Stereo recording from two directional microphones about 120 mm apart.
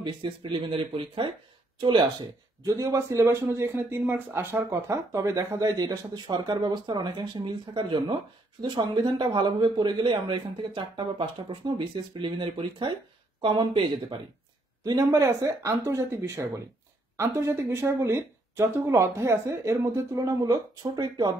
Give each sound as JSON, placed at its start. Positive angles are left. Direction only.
{"t": 0.0, "sound": "a man's voice", "side_deg": -45}
{"t": 2.6, "sound": "a man's voice", "side_deg": -25}